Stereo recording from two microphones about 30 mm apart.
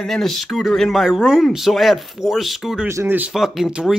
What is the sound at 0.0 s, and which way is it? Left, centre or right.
Speech, centre.